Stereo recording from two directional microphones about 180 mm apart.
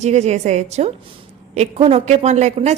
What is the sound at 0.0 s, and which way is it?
A woman's voice, 40° right (ahead or behind).